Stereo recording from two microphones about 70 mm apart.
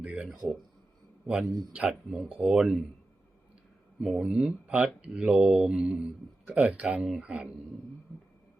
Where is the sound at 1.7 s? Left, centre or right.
Centre.